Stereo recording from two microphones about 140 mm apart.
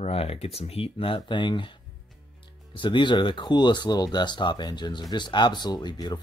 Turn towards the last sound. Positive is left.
turn(degrees=30)  # may be behind; listen again after turning